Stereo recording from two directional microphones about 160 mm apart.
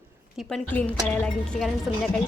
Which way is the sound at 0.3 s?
5° left (ahead or behind).